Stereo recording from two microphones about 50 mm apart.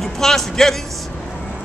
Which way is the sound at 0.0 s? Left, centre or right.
Centre.